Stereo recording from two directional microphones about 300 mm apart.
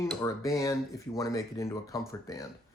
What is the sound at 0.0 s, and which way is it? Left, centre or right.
Speech, centre.